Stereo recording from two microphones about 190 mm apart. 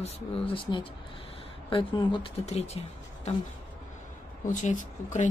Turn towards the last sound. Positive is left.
turn(degrees=40)  # may be behind; listen again after turning